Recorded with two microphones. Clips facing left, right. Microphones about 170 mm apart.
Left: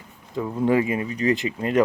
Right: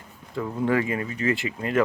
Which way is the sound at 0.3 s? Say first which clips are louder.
Left 3 dB; 15° left (ahead or behind).